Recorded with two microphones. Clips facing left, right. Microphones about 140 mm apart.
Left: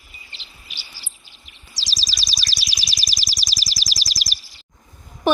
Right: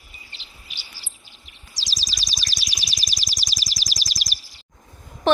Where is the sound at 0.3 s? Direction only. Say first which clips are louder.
Left 2 dB; 90° left.